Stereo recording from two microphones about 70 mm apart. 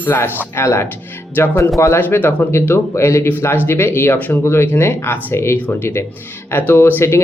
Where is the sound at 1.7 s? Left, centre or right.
Left.